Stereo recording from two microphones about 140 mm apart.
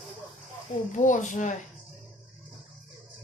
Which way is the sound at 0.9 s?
60° left (ahead or behind).